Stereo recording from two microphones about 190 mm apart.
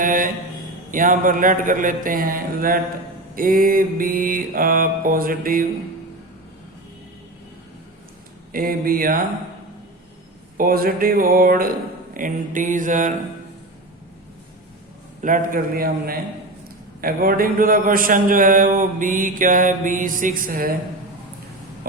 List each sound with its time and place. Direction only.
0.0 s a man's voice: 45° right (ahead or behind)
8.5 s a man's voice: 50° right (ahead or behind)
10.6 s a man's voice: 50° right (ahead or behind)
15.2 s a man's voice: 45° right (ahead or behind)